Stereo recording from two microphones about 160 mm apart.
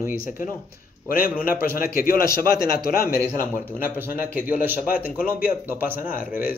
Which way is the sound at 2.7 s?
70° left (ahead or behind).